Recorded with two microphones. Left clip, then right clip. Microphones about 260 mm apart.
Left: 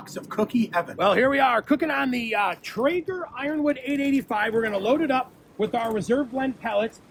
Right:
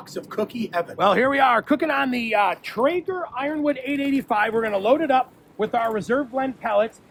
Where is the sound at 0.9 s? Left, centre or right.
Right.